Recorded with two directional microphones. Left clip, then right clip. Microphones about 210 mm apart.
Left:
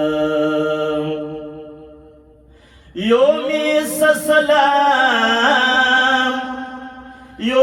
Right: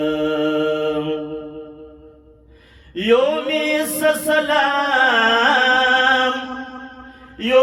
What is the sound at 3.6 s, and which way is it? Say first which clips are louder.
Music: left 3 dB; 15° right (ahead or behind).